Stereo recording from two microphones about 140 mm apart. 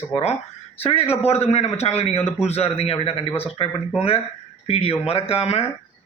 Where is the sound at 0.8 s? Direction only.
45° left (ahead or behind).